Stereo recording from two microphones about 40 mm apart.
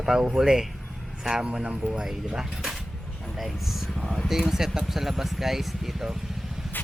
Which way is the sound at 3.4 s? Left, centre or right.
Centre.